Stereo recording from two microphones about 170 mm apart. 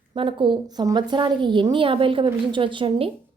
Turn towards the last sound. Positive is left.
turn(degrees=-30)  # may be behind; listen again after turning